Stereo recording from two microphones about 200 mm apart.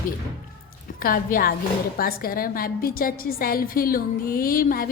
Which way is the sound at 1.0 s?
45° left (ahead or behind).